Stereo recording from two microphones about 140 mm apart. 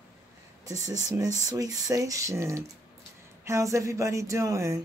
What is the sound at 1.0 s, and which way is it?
Speech, 25° right (ahead or behind).